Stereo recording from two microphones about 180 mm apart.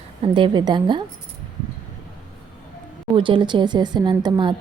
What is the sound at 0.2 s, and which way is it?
Speech, 25° right (ahead or behind).